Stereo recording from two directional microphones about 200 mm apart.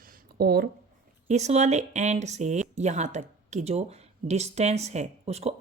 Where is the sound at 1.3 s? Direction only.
35° right (ahead or behind).